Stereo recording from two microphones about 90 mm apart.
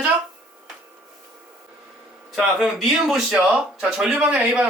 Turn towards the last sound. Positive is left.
turn(degrees=-10)  # may be behind; listen again after turning